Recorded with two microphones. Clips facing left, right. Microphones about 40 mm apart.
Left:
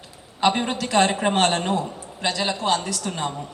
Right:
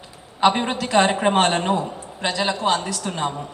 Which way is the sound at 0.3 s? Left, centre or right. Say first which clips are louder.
Right 3 dB; centre.